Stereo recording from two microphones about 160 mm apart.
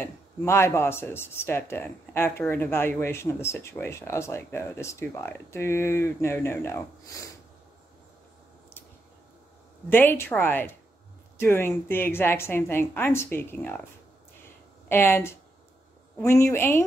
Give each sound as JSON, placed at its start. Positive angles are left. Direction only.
{"t": 0.0, "sound": "speech", "side_deg": 15}
{"t": 9.8, "sound": "speech", "side_deg": 10}
{"t": 14.9, "sound": "speech", "side_deg": 15}